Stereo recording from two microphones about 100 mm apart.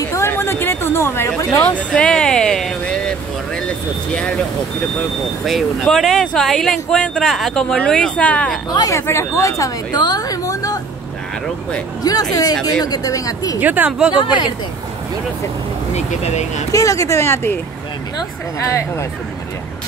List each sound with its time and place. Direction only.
0.1 s speech: 25° left (ahead or behind)
5.4 s speech: centre (ahead or behind)
8.9 s speech: 25° left (ahead or behind)
9.9 s a woman's voice: 45° left (ahead or behind)
12.0 s a woman's voice: 40° left (ahead or behind)
13.6 s speech: 15° right (ahead or behind)
14.1 s speech: 50° left (ahead or behind)
15.9 s speech: 90° left
16.7 s speech: 35° left (ahead or behind)
18.6 s speech: 30° left (ahead or behind)